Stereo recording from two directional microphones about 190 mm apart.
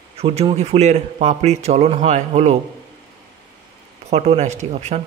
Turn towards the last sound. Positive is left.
turn(degrees=-40)  # may be behind; listen again after turning